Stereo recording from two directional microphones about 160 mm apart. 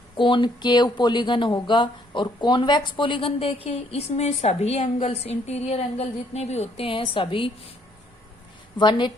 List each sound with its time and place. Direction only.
0.2 s speech: 30° left (ahead or behind)
8.8 s a woman's voice: 30° left (ahead or behind)